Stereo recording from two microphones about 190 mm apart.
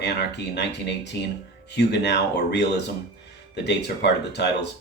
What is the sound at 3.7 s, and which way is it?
Speech, 60° left (ahead or behind).